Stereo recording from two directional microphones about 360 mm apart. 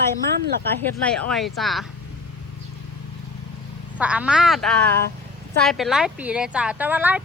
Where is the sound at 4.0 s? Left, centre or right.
Centre.